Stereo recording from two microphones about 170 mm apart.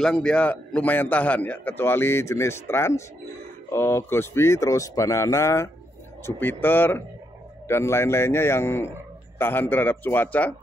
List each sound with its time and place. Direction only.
0.0 s a man's voice: 5° left (ahead or behind)